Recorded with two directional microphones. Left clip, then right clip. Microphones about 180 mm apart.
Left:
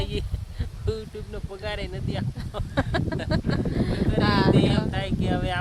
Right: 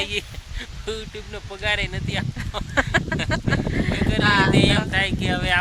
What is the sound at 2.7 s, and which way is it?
Speech, 15° right (ahead or behind).